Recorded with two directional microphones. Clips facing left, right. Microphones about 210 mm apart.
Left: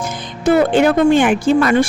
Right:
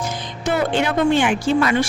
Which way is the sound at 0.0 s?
55° left (ahead or behind).